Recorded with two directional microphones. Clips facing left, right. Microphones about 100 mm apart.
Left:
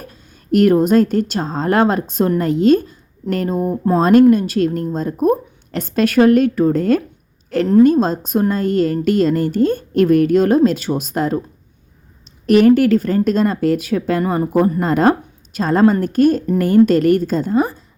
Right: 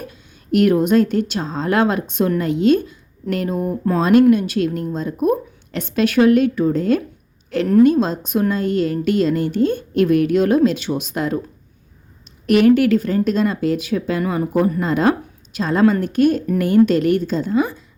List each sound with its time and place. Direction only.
0.1 s a woman's voice: 40° left (ahead or behind)
12.5 s a woman's voice: 40° left (ahead or behind)